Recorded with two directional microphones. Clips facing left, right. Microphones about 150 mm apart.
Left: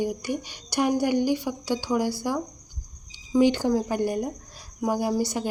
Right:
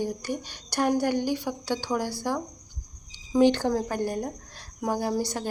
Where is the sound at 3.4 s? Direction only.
10° left (ahead or behind).